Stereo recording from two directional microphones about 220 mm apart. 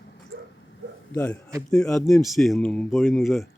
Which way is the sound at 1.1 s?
5° left (ahead or behind).